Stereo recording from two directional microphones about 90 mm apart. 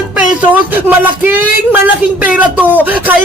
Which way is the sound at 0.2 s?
20° right (ahead or behind).